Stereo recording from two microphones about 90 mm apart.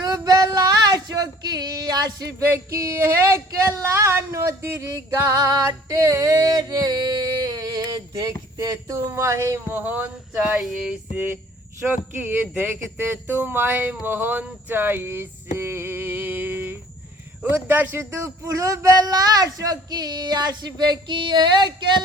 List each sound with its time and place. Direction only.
0.0 s a sound: 45° right (ahead or behind)
2.4 s speech: 25° right (ahead or behind)
5.3 s music: 40° right (ahead or behind)
8.6 s speech: 40° right (ahead or behind)
9.6 s a sound: 20° right (ahead or behind)
11.9 s speech: 20° right (ahead or behind)
18.2 s a man's voice: 40° right (ahead or behind); by 22.0 s 55° right (ahead or behind)